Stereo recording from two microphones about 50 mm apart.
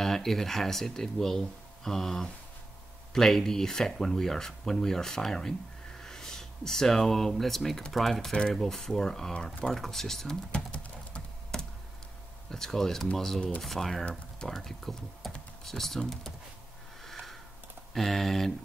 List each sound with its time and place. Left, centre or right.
0.0 s speech: centre
10.7 s typing: left
12.4 s speech: centre
17.0 s a sound: centre
17.9 s speech: centre